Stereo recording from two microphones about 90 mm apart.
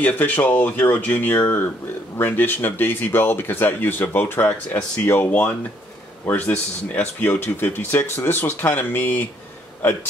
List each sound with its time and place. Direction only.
0.0 s speech: 20° left (ahead or behind)